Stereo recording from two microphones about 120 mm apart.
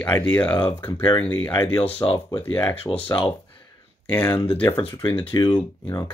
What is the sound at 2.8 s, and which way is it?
Speech, 50° left (ahead or behind).